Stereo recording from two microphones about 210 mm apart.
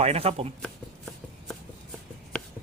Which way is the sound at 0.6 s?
5° left (ahead or behind).